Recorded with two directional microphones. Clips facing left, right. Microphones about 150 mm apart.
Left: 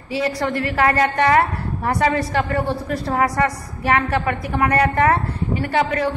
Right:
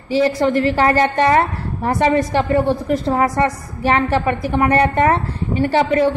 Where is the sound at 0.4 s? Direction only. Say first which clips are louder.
Right 5 dB; 25° right (ahead or behind).